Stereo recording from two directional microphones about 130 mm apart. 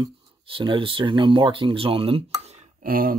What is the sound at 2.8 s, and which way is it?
Speech, 90° right.